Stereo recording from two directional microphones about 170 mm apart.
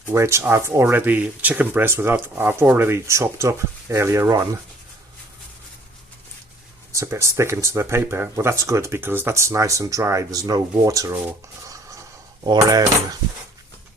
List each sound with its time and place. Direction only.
0.1 s speech: 15° right (ahead or behind)
6.9 s speech: 15° right (ahead or behind)
11.7 s a sound: 20° right (ahead or behind)
12.5 s speech: 20° right (ahead or behind)